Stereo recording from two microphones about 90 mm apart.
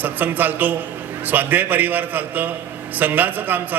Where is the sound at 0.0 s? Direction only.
20° right (ahead or behind).